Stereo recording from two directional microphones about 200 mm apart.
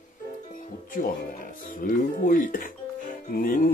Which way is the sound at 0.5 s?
45° left (ahead or behind).